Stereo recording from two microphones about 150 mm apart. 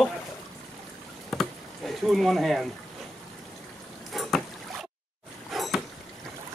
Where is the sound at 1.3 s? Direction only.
Centre (ahead or behind).